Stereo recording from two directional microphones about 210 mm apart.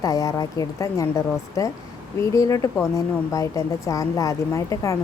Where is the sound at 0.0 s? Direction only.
15° left (ahead or behind).